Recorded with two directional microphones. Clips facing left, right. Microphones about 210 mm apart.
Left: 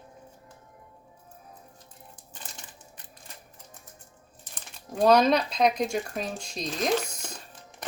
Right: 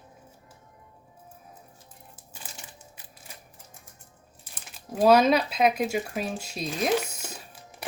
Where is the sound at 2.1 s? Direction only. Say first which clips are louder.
Even; 5° right (ahead or behind).